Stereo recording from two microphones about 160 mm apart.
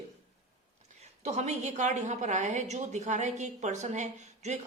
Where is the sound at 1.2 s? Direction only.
45° right (ahead or behind).